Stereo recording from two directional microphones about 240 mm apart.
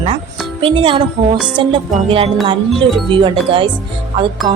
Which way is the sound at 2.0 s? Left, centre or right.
Right.